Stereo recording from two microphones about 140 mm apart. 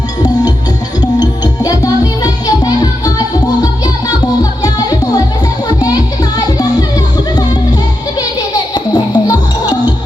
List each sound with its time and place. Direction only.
1.2 s music: 25° left (ahead or behind)
8.5 s music: 30° left (ahead or behind)